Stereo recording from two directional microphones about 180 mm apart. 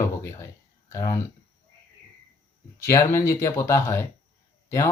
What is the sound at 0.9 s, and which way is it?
Speech, 15° left (ahead or behind).